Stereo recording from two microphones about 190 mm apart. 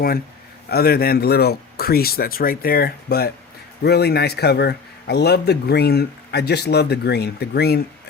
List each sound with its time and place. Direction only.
0.7 s a man's voice: 55° left (ahead or behind)